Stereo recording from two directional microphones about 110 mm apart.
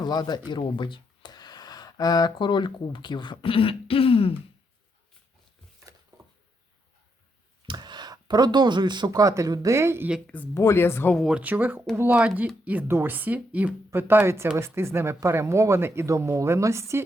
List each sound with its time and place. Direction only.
0.0 s speech: 40° left (ahead or behind); by 4.4 s 60° left (ahead or behind)
7.7 s speech: 40° right (ahead or behind); by 10.1 s 25° right (ahead or behind)
10.2 s speech: 15° left (ahead or behind)
10.5 s speech: 25° left (ahead or behind)
11.2 s speech: 10° right (ahead or behind); by 17.1 s 25° right (ahead or behind)